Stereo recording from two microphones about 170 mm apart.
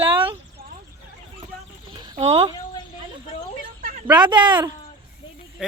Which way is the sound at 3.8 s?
50° right (ahead or behind).